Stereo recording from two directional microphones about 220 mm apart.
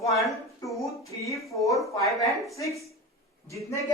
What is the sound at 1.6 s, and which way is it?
Speech, 15° left (ahead or behind).